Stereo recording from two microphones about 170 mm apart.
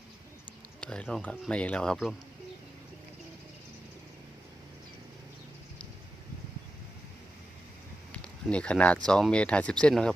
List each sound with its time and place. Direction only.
0.8 s speech: 5° left (ahead or behind)
8.1 s a sound: 5° left (ahead or behind)
9.0 s speech: 5° left (ahead or behind)